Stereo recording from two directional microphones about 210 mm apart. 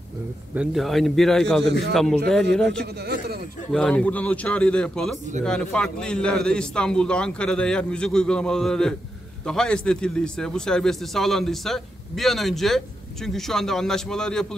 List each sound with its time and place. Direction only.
0.6 s a man's voice: centre (ahead or behind)
2.8 s a man's voice: 45° right (ahead or behind)
3.7 s a man's voice: 5° left (ahead or behind)